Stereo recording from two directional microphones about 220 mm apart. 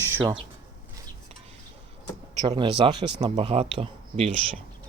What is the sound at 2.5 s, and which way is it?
Speech, 25° right (ahead or behind).